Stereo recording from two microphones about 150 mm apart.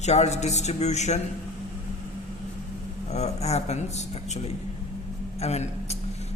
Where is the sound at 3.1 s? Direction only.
45° left (ahead or behind).